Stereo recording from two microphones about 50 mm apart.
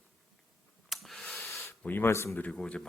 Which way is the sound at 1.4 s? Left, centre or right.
Left.